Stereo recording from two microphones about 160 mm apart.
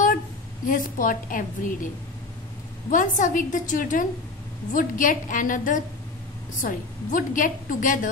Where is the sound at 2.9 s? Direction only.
55° left (ahead or behind).